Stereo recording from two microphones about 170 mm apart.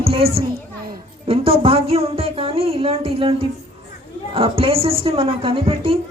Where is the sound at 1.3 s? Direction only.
35° right (ahead or behind).